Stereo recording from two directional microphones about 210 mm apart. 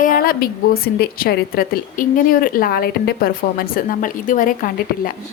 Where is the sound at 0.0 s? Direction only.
45° left (ahead or behind).